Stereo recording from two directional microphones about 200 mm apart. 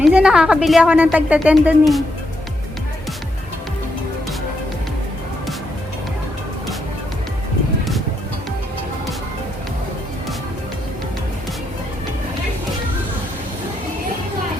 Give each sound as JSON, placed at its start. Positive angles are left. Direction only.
{"t": 0.0, "sound": "a woman's voice", "side_deg": -5}